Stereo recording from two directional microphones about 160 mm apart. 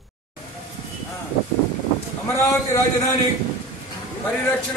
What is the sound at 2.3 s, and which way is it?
Speech, 20° left (ahead or behind).